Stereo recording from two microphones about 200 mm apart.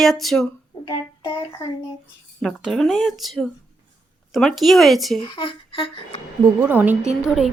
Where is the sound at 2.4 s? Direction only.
Centre (ahead or behind).